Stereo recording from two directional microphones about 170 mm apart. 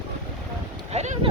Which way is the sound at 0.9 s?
40° right (ahead or behind).